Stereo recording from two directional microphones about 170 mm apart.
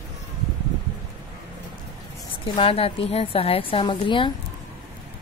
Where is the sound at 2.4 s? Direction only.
35° left (ahead or behind).